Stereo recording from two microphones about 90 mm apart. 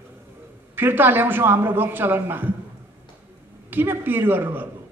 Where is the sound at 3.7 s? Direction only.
25° right (ahead or behind).